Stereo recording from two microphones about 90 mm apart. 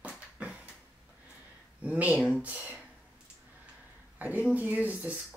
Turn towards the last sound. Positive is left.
turn(degrees=-15)  # may be behind; listen again after turning